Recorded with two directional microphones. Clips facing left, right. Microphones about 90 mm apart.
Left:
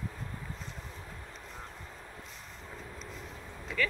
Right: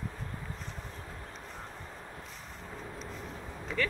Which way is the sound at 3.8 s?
35° right (ahead or behind).